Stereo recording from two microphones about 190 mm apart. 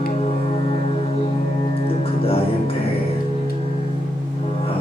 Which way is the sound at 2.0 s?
30° left (ahead or behind).